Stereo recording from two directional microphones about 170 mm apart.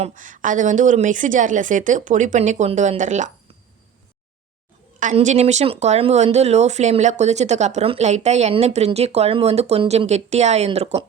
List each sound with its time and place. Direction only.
0.0 s a woman's voice: 50° right (ahead or behind)
4.9 s speech: 45° right (ahead or behind)